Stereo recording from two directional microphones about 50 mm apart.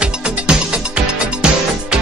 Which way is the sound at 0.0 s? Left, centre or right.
Right.